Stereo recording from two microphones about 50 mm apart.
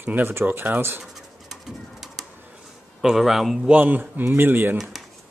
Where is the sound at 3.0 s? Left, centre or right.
Centre.